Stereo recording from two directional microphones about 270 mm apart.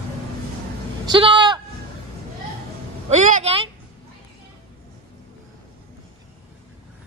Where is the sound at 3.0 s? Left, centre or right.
Right.